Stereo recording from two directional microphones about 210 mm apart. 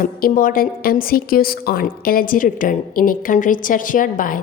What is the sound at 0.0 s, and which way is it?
A woman's voice, 40° left (ahead or behind).